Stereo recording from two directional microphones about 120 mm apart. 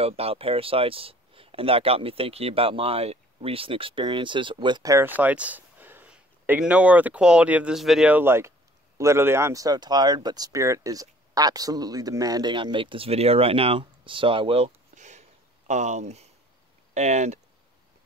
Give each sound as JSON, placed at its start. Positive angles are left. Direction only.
{"t": 0.0, "sound": "speech", "side_deg": -55}
{"t": 4.8, "sound": "speech", "side_deg": -25}
{"t": 5.1, "sound": "speech", "side_deg": -10}
{"t": 8.1, "sound": "speech", "side_deg": -20}
{"t": 15.0, "sound": "a sound", "side_deg": -80}
{"t": 16.9, "sound": "speech", "side_deg": -75}